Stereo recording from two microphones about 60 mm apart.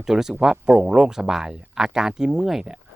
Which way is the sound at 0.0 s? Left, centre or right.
Centre.